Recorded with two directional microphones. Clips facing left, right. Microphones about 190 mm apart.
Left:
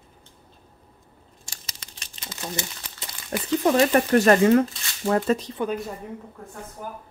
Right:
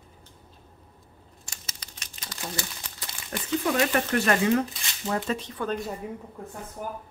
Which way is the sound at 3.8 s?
35° left (ahead or behind).